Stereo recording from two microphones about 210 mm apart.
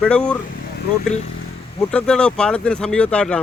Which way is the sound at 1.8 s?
5° left (ahead or behind).